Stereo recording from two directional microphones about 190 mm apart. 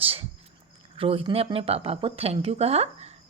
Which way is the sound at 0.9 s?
30° right (ahead or behind).